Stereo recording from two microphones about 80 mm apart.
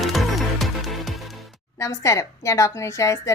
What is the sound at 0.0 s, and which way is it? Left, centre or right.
Music, centre.